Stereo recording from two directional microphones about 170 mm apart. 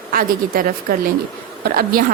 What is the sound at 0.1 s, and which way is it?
A woman's voice, 55° right (ahead or behind).